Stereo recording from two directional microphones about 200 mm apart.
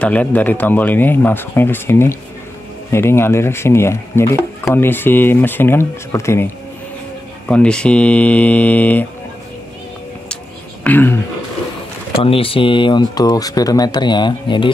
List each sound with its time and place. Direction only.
0.0 s speech: 5° left (ahead or behind)
10.8 s speech: 10° left (ahead or behind)
12.2 s speech: 30° left (ahead or behind)